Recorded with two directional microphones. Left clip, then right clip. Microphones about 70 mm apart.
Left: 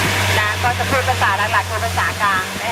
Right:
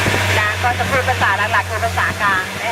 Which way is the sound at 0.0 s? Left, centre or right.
Right.